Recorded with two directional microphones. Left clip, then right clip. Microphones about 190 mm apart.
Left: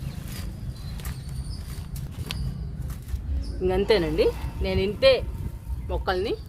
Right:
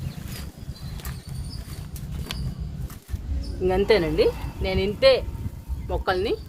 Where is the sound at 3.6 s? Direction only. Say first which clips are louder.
Right 2 dB; 10° right (ahead or behind).